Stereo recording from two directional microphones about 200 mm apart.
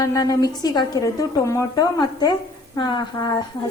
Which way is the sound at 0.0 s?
15° left (ahead or behind).